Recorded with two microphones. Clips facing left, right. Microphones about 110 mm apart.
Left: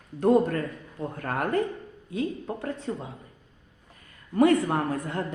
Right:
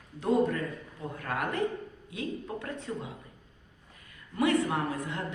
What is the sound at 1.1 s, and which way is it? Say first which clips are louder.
A woman's voice: left 6 dB; 45° left (ahead or behind).